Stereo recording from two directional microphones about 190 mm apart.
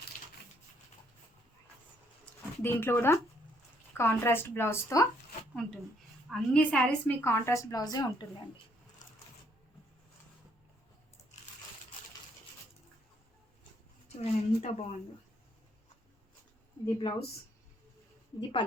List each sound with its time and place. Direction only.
2.6 s a woman's voice: 10° left (ahead or behind)
6.3 s a woman's voice: 5° left (ahead or behind)
14.2 s speech: 35° left (ahead or behind)
16.8 s speech: 25° left (ahead or behind)